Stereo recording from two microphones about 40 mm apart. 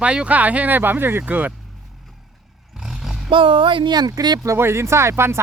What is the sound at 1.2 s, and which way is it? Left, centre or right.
Speech, right.